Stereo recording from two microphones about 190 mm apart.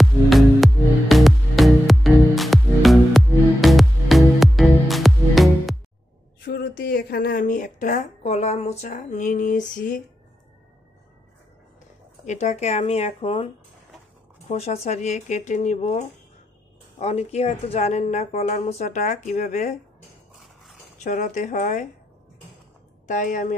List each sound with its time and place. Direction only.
0.0 s music: centre (ahead or behind)
6.4 s a sound: 50° left (ahead or behind)
12.3 s a woman's voice: 35° left (ahead or behind)
14.5 s a woman's voice: 35° left (ahead or behind)
17.0 s a woman's voice: 35° left (ahead or behind)
21.0 s a woman's voice: 40° left (ahead or behind)
23.0 s a woman's voice: 40° left (ahead or behind)